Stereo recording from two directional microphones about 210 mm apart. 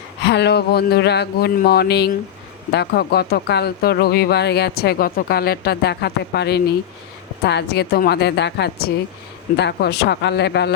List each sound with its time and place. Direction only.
0.3 s speech: 55° left (ahead or behind)